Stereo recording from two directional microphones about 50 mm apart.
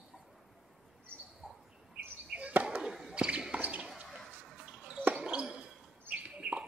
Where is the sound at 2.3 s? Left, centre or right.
Right.